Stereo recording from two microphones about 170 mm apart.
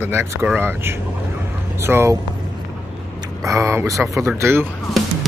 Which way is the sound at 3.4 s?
15° right (ahead or behind).